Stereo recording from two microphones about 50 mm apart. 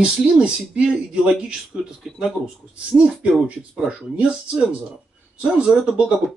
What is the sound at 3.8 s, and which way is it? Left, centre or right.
Speech, centre.